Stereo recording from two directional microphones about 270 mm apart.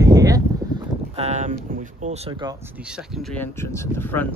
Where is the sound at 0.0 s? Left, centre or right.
Centre.